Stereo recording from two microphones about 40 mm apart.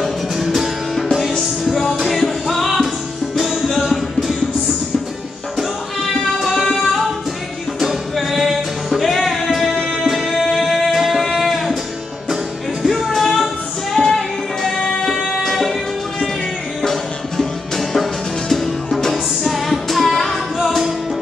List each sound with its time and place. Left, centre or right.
1.6 s music: centre
6.4 s music: centre
7.8 s music: centre
12.8 s music: centre
16.8 s music: centre